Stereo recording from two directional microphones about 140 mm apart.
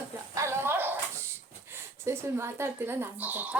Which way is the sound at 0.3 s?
20° right (ahead or behind).